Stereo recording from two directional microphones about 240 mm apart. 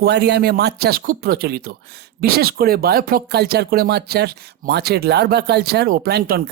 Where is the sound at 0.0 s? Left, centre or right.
Right.